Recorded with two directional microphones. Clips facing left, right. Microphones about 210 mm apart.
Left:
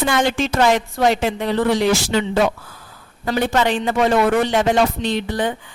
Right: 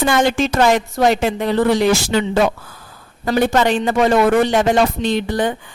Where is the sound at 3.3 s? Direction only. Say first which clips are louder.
Right 3 dB; 45° right (ahead or behind).